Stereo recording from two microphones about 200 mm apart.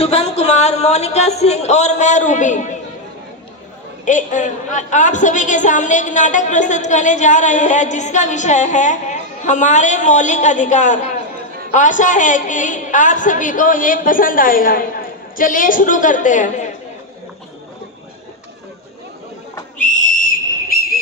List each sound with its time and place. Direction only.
0.0 s a woman's voice: 30° left (ahead or behind)
4.0 s a woman's voice: 40° left (ahead or behind)
19.8 s whistle: 40° left (ahead or behind)